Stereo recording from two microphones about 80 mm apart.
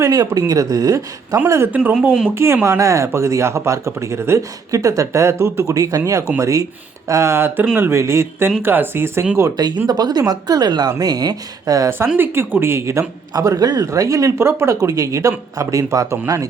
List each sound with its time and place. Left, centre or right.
0.0 s speech: right
1.7 s speech: centre
2.3 s speech: right
9.6 s speech: right
12.1 s speech: right
13.3 s speech: right